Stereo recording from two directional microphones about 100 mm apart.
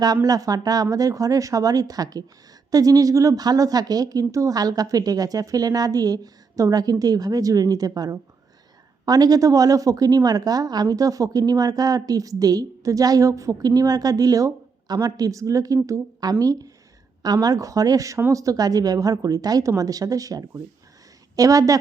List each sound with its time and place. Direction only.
0.0 s a woman's voice: 40° right (ahead or behind)